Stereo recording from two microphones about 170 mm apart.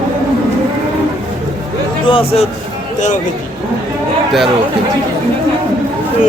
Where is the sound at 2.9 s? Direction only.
45° left (ahead or behind).